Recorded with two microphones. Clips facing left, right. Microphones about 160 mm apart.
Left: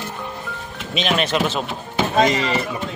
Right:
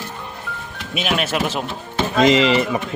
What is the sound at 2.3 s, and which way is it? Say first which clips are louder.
Speech: right 6 dB; 90° right.